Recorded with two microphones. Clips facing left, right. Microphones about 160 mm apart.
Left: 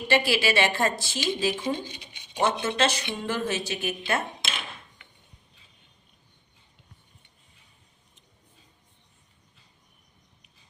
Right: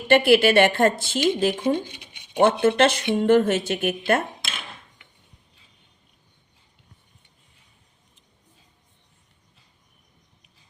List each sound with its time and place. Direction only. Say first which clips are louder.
0.1 s speech: right 8 dB; 55° right (ahead or behind)